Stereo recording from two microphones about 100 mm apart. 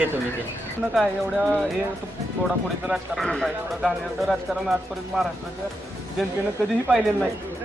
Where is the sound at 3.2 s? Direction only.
5° left (ahead or behind).